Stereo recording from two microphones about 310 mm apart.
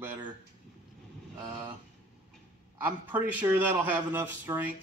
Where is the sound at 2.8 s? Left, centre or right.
Centre.